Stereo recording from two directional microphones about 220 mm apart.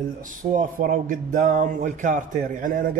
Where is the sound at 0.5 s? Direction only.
35° right (ahead or behind).